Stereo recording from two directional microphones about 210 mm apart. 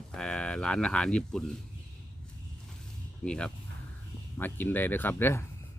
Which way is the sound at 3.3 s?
5° left (ahead or behind).